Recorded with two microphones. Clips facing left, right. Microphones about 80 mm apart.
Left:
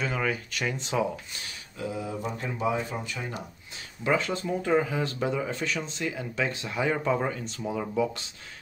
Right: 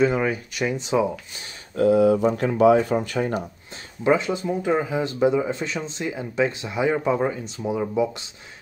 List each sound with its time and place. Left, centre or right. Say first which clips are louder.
0.0 s speech: right 8 dB; right
1.8 s speech: right 16 dB; right
4.0 s speech: right 6 dB; right